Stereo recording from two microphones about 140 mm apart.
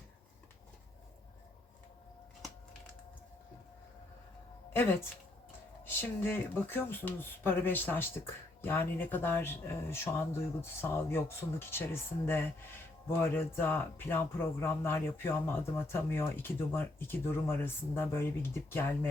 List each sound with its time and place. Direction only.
4.7 s a woman's voice: 15° left (ahead or behind)